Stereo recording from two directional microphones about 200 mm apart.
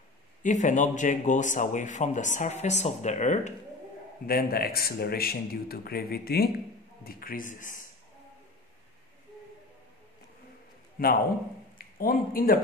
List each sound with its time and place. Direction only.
0.4 s speech: 40° left (ahead or behind)
4.3 s speech: 50° left (ahead or behind)
11.0 s speech: 45° left (ahead or behind)